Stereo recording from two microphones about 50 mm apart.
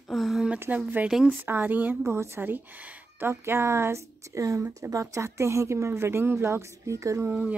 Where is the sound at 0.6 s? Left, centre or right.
Right.